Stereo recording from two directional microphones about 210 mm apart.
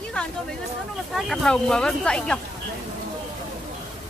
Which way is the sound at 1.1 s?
5° left (ahead or behind).